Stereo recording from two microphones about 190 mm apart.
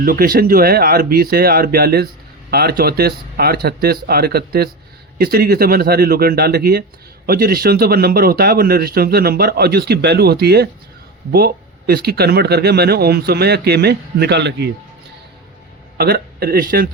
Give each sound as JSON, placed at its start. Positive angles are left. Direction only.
{"t": 0.0, "sound": "speech", "side_deg": -50}
{"t": 16.0, "sound": "speech", "side_deg": -55}